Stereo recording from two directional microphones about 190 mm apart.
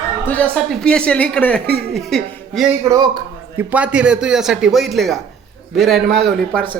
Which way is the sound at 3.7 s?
5° right (ahead or behind).